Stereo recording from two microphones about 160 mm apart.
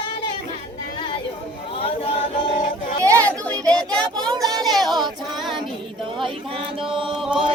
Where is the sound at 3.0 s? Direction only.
20° right (ahead or behind).